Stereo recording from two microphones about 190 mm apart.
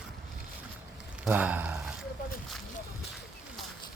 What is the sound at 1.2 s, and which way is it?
Speech, 10° right (ahead or behind).